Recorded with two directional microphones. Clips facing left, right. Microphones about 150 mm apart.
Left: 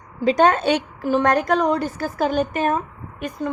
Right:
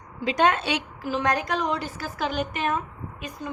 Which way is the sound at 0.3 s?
45° left (ahead or behind).